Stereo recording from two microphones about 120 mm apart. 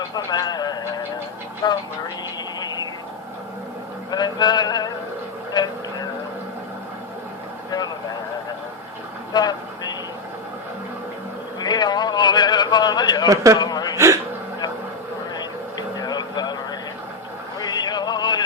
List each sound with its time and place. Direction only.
0.1 s speech: 35° left (ahead or behind)
1.6 s music: 40° left (ahead or behind)
2.6 s radio: 35° left (ahead or behind)
4.1 s music: 35° left (ahead or behind)
5.5 s vehicle: 35° left (ahead or behind)
9.3 s vehicle: 35° left (ahead or behind)
11.6 s a sound: 35° left (ahead or behind)
13.2 s a man's voice: 30° right (ahead or behind)
13.6 s a sound: 35° left (ahead or behind)
13.9 s a sound: 25° right (ahead or behind)
16.0 s a sound: 35° left (ahead or behind)
17.6 s music: 35° left (ahead or behind)